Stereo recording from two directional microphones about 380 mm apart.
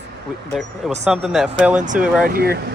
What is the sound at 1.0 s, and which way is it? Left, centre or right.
Speech, centre.